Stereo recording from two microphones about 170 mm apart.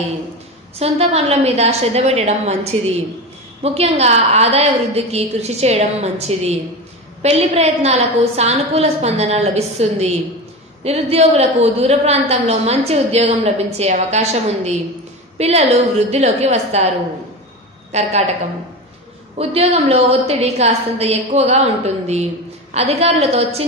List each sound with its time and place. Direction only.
0.7 s a woman's voice: 35° right (ahead or behind)
17.9 s a woman's voice: 40° right (ahead or behind)
19.3 s a woman's voice: 35° right (ahead or behind)